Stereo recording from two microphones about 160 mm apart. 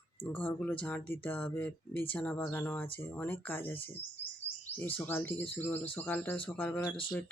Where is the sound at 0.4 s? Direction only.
10° left (ahead or behind).